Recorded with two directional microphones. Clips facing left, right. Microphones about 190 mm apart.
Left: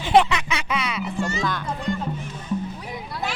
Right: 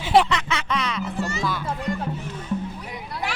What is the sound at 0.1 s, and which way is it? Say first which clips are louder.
Music: left 1 dB; 5° left (ahead or behind).